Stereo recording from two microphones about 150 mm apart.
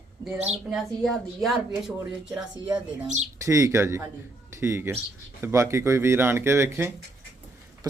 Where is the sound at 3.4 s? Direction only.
20° right (ahead or behind).